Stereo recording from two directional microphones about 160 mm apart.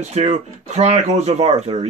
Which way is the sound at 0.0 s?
45° right (ahead or behind).